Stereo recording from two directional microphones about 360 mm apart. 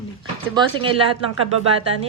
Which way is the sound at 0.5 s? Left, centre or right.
Centre.